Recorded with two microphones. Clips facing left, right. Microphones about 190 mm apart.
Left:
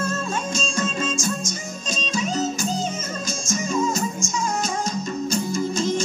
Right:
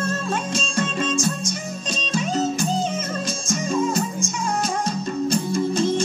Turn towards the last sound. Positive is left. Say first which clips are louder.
# right 2 dB
turn(degrees=-60)  # may be behind; listen again after turning